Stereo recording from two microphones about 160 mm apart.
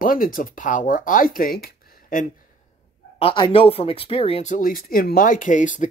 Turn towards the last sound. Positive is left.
turn(degrees=50)  # may be behind; listen again after turning